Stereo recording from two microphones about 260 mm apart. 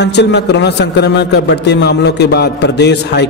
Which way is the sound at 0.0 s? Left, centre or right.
Left.